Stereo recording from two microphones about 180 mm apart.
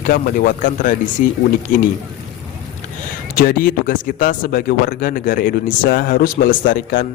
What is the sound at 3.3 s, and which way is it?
Speech, 50° left (ahead or behind).